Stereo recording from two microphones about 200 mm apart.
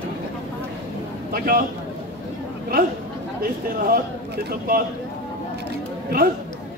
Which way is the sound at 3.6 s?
50° right (ahead or behind).